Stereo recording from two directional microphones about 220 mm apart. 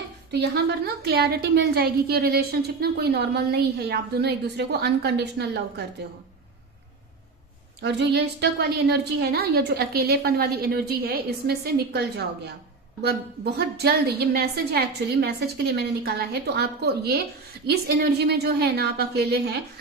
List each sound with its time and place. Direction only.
0.3 s a woman's voice: 50° right (ahead or behind)
7.8 s a woman's voice: 50° right (ahead or behind)